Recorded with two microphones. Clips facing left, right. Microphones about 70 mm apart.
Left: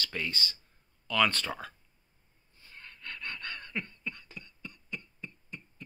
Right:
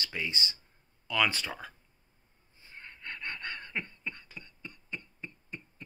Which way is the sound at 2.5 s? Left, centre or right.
Right.